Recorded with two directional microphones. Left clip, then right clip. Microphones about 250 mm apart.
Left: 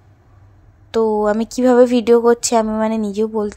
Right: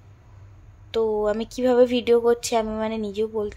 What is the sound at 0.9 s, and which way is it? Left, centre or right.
Speech, centre.